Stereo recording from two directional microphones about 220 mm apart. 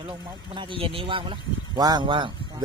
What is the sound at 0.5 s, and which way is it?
A man's voice, 20° right (ahead or behind).